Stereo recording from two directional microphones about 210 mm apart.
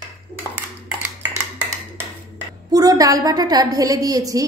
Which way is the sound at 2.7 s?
15° right (ahead or behind).